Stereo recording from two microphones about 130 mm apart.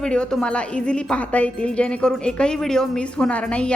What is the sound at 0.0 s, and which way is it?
A woman's voice, 5° left (ahead or behind).